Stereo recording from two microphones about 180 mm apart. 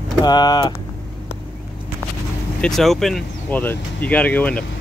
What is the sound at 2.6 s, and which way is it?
Speech, centre (ahead or behind).